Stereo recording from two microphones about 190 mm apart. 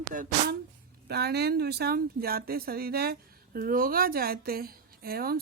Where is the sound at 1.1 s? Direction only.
60° right (ahead or behind).